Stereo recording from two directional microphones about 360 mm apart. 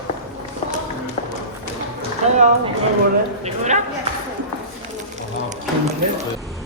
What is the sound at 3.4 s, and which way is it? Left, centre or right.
Speech, centre.